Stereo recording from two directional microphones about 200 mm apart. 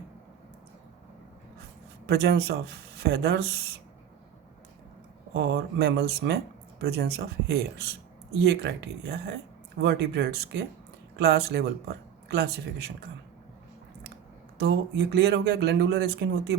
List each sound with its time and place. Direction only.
2.0 s speech: 55° right (ahead or behind)
5.3 s speech: 55° right (ahead or behind)
14.6 s speech: 60° right (ahead or behind)